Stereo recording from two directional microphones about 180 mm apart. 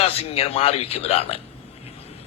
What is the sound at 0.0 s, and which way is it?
A man's voice, 35° left (ahead or behind).